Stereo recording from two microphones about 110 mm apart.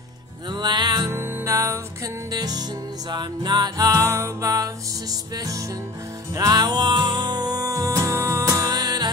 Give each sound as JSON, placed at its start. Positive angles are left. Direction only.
{"t": 0.5, "sound": "music", "side_deg": -40}
{"t": 1.1, "sound": "music", "side_deg": -25}
{"t": 2.3, "sound": "music", "side_deg": -35}
{"t": 6.3, "sound": "music", "side_deg": -35}